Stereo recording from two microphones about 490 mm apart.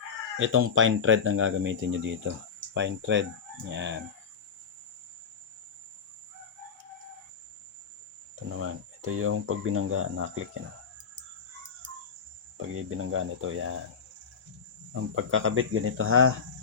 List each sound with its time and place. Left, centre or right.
0.3 s speech: right
8.4 s speech: right
12.7 s speech: right
15.1 s speech: right